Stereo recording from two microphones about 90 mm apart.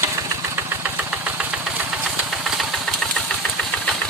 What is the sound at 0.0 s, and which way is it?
Engine, 30° right (ahead or behind).